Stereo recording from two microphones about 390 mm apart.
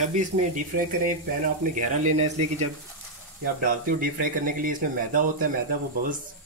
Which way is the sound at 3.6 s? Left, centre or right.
Right.